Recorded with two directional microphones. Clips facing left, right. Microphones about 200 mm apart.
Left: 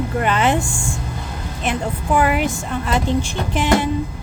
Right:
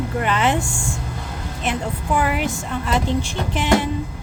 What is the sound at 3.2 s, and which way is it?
Speech, 50° left (ahead or behind).